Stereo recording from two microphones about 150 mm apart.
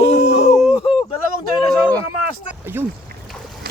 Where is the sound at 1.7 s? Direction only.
10° left (ahead or behind).